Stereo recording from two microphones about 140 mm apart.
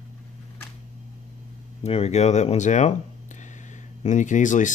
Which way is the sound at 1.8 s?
50° left (ahead or behind).